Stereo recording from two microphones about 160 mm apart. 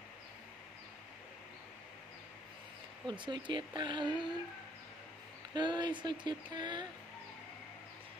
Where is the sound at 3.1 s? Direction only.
30° right (ahead or behind).